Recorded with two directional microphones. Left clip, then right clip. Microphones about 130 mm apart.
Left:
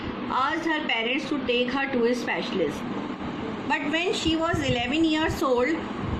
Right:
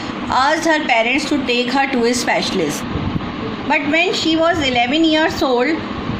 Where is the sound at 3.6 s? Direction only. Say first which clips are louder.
Right 10 dB; 35° right (ahead or behind).